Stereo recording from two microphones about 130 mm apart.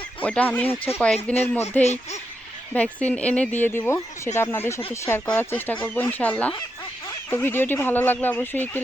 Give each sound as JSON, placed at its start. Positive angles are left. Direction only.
{"t": 0.2, "sound": "speech", "side_deg": 10}
{"t": 1.4, "sound": "speech", "side_deg": 55}
{"t": 2.7, "sound": "speech", "side_deg": 10}